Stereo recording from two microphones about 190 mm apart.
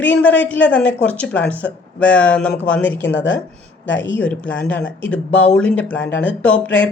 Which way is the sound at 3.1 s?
85° left.